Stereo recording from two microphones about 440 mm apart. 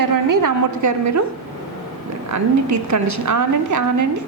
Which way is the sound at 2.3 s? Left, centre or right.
Right.